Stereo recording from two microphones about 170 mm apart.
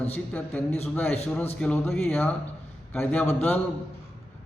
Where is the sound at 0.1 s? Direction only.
10° left (ahead or behind).